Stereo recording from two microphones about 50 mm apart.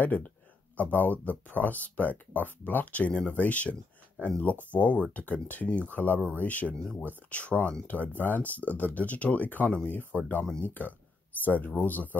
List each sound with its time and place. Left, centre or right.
0.0 s speech: left